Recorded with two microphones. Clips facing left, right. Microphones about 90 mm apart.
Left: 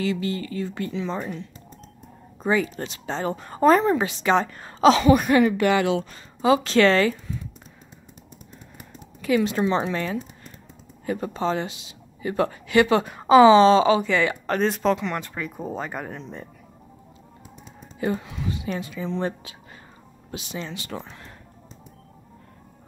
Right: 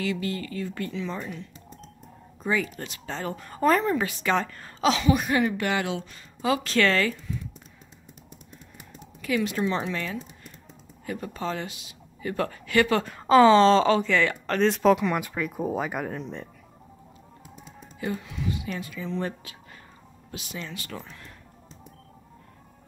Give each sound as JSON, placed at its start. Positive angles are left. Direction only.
{"t": 0.0, "sound": "speech", "side_deg": 25}
{"t": 2.7, "sound": "speech", "side_deg": 30}
{"t": 4.7, "sound": "speech", "side_deg": 40}
{"t": 6.4, "sound": "speech", "side_deg": 25}
{"t": 9.2, "sound": "speech", "side_deg": 30}
{"t": 12.2, "sound": "speech", "side_deg": 15}
{"t": 18.0, "sound": "speech", "side_deg": 35}